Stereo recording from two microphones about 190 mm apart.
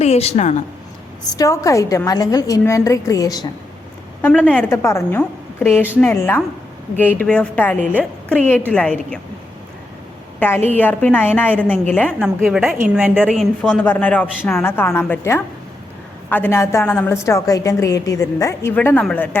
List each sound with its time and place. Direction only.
0.0 s a woman's voice: 35° left (ahead or behind)
1.3 s a woman's voice: 20° left (ahead or behind)
4.2 s a woman's voice: 5° left (ahead or behind)
10.8 s a woman's voice: 10° left (ahead or behind)